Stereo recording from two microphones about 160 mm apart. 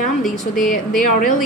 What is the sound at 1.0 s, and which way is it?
Speech, 55° left (ahead or behind).